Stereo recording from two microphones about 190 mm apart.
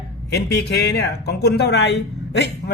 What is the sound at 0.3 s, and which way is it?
Speech, 60° left (ahead or behind).